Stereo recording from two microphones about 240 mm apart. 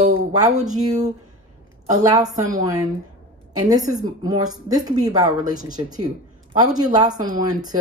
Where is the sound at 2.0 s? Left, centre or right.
Centre.